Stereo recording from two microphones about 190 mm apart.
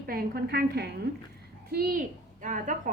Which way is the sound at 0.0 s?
50° right (ahead or behind).